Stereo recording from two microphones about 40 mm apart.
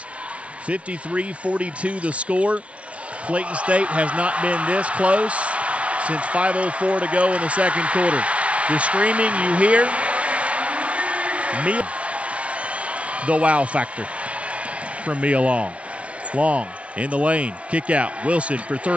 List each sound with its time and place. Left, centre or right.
0.7 s a man's voice: right
15.0 s speech: right